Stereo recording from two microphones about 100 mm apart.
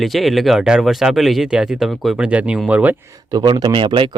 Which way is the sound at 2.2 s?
10° right (ahead or behind).